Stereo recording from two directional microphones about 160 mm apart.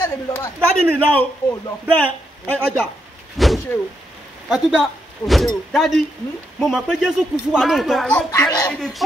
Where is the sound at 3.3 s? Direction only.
Centre (ahead or behind).